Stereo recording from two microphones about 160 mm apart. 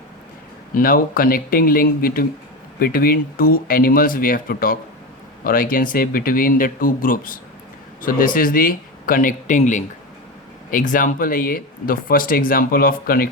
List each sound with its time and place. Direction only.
0.7 s speech: 65° left (ahead or behind)